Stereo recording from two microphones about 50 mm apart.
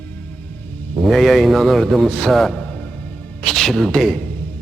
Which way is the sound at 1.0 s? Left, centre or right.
Centre.